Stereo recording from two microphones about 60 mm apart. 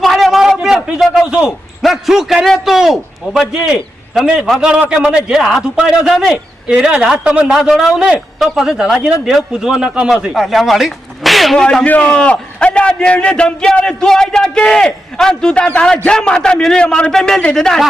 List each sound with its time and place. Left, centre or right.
0.0 s a sound: centre
1.2 s a man's voice: centre
6.3 s speech: right
10.3 s speech: centre
11.6 s a man's voice: centre